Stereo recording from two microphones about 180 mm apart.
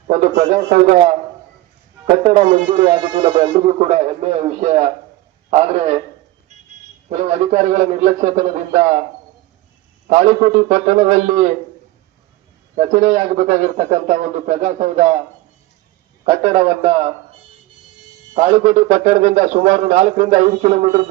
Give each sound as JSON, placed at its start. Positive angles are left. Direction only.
{"t": 0.1, "sound": "speech", "side_deg": -40}
{"t": 2.0, "sound": "speech", "side_deg": -40}
{"t": 7.1, "sound": "speech", "side_deg": -40}
{"t": 10.1, "sound": "a man's voice", "side_deg": -45}
{"t": 12.7, "sound": "a man's voice", "side_deg": -40}
{"t": 16.2, "sound": "speech", "side_deg": -35}
{"t": 18.3, "sound": "speech", "side_deg": -35}